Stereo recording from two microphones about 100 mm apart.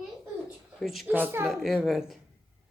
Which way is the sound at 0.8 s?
Centre (ahead or behind).